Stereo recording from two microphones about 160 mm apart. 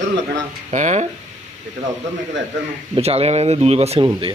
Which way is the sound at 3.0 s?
40° right (ahead or behind).